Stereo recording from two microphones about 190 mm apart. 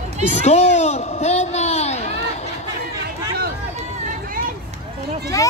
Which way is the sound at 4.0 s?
45° right (ahead or behind).